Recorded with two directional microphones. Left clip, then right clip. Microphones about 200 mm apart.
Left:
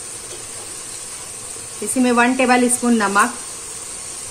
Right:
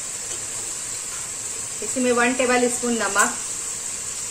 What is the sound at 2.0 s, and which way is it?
Speech, 55° left (ahead or behind).